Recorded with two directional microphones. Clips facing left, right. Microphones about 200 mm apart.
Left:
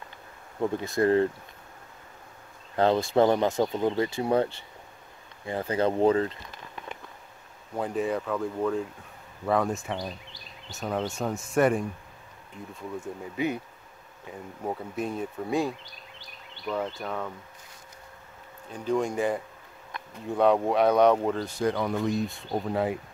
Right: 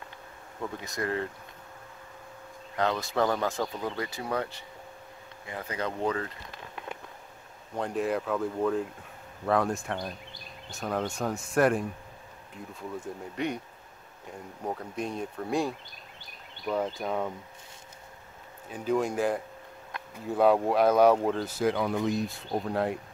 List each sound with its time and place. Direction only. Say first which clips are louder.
0.6 s speech: left 9 dB; 30° left (ahead or behind)
2.7 s speech: left 6 dB; 30° left (ahead or behind)
7.7 s speech: left 1 dB; centre (ahead or behind)
13.0 s speech: left 3 dB; 5° left (ahead or behind)
14.6 s speech: left 2 dB; 5° left (ahead or behind); by 17.3 s 10° right (ahead or behind)
18.7 s speech: left 1 dB; 5° right (ahead or behind)